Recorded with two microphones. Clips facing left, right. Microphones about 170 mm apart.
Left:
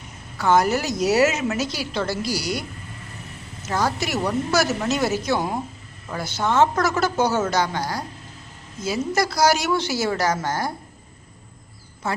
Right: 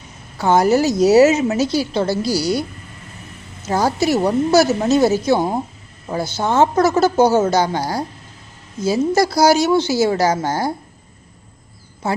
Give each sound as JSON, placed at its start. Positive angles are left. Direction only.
{"t": 0.3, "sound": "a woman's voice", "side_deg": -30}
{"t": 3.7, "sound": "a woman's voice", "side_deg": -30}
{"t": 12.0, "sound": "a woman's voice", "side_deg": -30}